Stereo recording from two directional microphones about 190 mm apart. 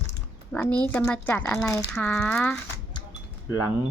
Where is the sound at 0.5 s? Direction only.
5° left (ahead or behind).